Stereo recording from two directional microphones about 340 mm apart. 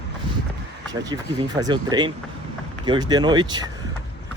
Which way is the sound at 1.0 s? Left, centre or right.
Centre.